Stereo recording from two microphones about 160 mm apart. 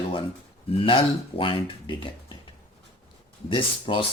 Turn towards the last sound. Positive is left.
turn(degrees=30)  # may be behind; listen again after turning